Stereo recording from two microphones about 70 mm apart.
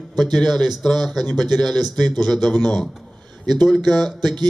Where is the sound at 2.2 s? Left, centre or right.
Centre.